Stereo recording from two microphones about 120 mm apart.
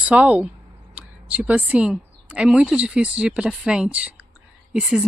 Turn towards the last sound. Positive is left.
turn(degrees=-5)  # may be behind; listen again after turning